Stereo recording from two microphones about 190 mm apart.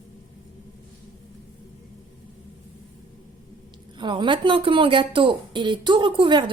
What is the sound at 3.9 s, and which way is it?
A woman's voice, 25° right (ahead or behind).